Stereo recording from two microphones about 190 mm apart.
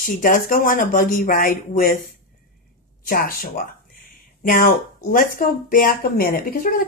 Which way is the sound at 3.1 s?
50° left (ahead or behind).